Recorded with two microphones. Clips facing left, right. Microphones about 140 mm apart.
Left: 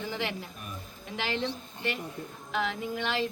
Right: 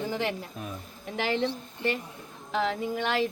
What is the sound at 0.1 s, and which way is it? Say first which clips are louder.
Speech: right 2 dB; 45° right (ahead or behind).